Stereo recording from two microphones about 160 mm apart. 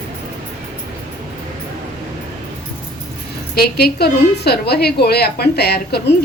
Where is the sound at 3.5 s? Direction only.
80° left.